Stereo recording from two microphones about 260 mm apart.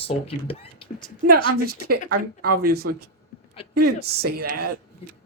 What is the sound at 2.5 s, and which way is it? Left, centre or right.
Speech, right.